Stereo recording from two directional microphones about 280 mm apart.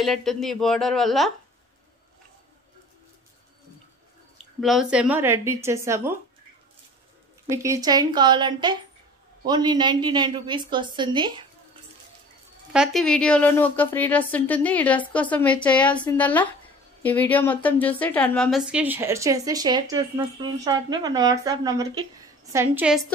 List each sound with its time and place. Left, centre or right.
0.0 s a woman's voice: centre
4.6 s speech: centre
7.5 s speech: centre
12.7 s a woman's voice: centre